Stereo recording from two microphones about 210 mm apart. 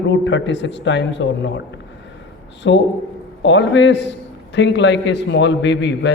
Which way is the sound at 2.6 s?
60° left (ahead or behind).